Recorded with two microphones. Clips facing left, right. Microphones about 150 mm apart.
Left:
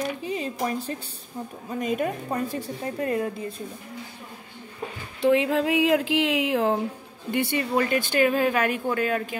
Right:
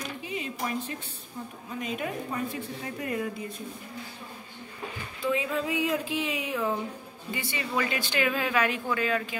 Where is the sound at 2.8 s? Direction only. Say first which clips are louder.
Left 6 dB; 35° left (ahead or behind).